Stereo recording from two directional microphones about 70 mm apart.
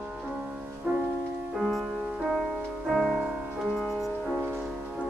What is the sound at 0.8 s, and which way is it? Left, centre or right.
Music, right.